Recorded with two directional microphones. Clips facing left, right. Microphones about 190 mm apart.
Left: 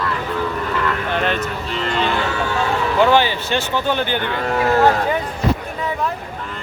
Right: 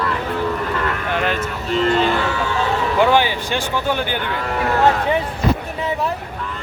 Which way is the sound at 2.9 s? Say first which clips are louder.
Left 1 dB; 15° right (ahead or behind).